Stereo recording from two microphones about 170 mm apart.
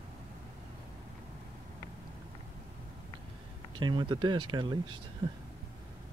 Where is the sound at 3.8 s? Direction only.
25° right (ahead or behind).